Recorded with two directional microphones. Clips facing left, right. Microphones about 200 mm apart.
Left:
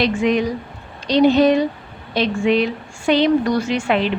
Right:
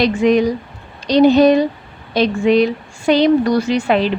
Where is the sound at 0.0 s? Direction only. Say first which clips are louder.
Right 4 dB; 40° right (ahead or behind).